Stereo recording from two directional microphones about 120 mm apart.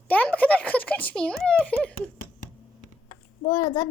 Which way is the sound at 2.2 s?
90° left.